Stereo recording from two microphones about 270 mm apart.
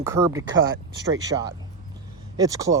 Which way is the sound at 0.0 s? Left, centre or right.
Centre.